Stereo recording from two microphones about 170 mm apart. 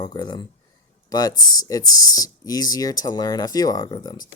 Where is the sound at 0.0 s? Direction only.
25° left (ahead or behind).